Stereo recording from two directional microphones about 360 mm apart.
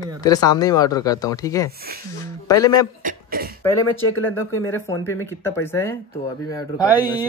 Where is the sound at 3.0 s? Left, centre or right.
Right.